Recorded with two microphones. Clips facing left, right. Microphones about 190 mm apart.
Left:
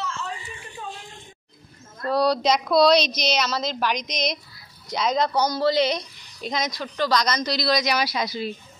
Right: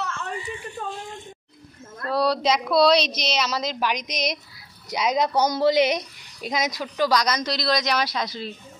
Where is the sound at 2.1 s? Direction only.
5° right (ahead or behind).